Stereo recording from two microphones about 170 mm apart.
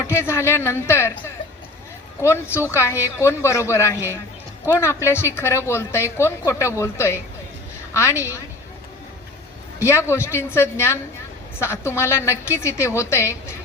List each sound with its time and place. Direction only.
0.1 s speech: 15° left (ahead or behind)
2.2 s speech: 15° left (ahead or behind)
9.8 s speech: 15° left (ahead or behind)